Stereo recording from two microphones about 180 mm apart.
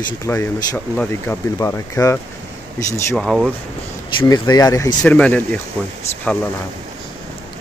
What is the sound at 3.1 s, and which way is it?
Speech, centre (ahead or behind).